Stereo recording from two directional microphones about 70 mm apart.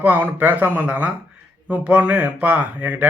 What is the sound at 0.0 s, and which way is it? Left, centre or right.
A man's voice, right.